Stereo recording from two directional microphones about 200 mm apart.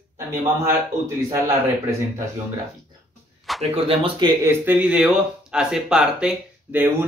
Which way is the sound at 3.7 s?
25° right (ahead or behind).